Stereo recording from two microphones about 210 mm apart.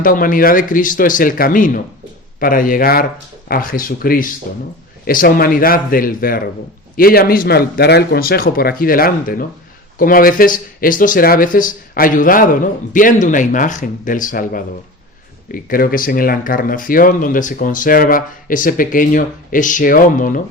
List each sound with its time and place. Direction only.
0.0 s speech: 40° left (ahead or behind)